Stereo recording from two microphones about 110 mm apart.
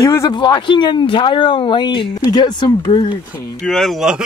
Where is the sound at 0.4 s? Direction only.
45° left (ahead or behind).